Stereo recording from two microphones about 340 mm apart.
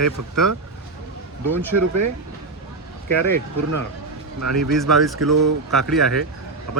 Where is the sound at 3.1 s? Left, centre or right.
Right.